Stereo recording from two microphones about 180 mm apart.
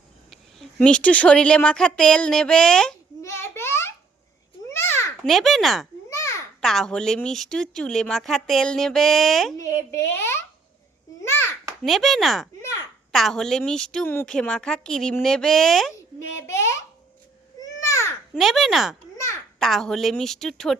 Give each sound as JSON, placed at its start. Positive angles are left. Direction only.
{"t": 0.3, "sound": "speech", "side_deg": 5}
{"t": 3.2, "sound": "a sound", "side_deg": 15}
{"t": 4.7, "sound": "babbling", "side_deg": 15}
{"t": 5.2, "sound": "a woman's voice", "side_deg": 0}
{"t": 9.6, "sound": "speech", "side_deg": 15}
{"t": 11.2, "sound": "a sound", "side_deg": 10}
{"t": 11.8, "sound": "a woman's voice", "side_deg": 0}
{"t": 16.4, "sound": "a child's voice", "side_deg": 15}
{"t": 17.6, "sound": "babbling", "side_deg": 15}
{"t": 18.3, "sound": "a woman's voice", "side_deg": 0}
{"t": 19.1, "sound": "a sound", "side_deg": 15}
{"t": 19.5, "sound": "a woman's voice", "side_deg": 0}